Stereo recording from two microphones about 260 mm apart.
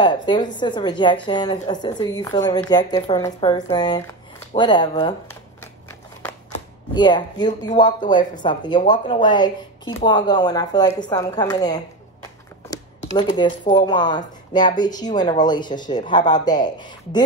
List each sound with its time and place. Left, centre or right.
0.0 s a woman's voice: centre
4.6 s shuffling cards: centre
6.9 s a woman's voice: centre